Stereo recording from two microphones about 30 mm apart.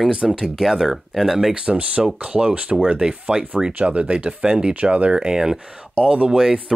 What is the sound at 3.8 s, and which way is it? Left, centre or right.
Speech, right.